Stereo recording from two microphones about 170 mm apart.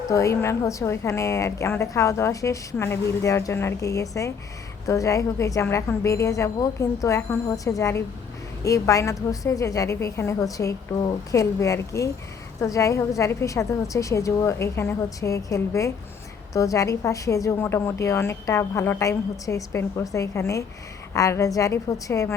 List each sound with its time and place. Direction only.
0.1 s a woman's voice: 15° left (ahead or behind)